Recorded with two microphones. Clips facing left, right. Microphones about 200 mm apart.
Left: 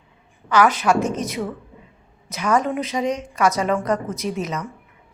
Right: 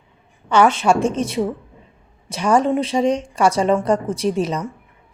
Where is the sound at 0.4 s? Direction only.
25° right (ahead or behind).